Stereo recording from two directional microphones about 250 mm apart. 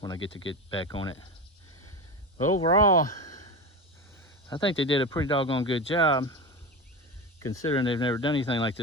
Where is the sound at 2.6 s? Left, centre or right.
Centre.